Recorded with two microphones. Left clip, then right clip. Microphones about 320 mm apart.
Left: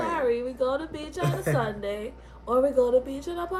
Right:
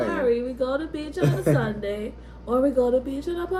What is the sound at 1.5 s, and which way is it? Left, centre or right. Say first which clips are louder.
A woman's voice: right 2 dB; centre.